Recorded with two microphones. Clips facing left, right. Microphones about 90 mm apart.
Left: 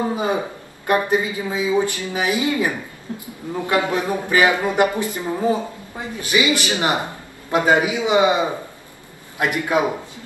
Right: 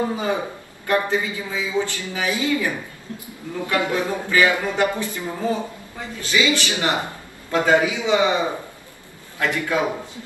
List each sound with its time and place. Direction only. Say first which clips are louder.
0.1 s a man's voice: left 2 dB; 20° left (ahead or behind)